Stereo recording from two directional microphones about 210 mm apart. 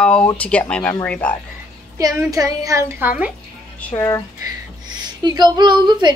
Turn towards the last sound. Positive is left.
turn(degrees=-20)  # may be behind; listen again after turning